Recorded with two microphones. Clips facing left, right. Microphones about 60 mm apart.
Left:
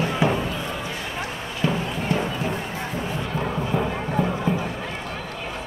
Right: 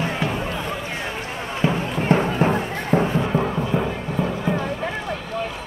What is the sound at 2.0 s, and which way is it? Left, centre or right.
Run, right.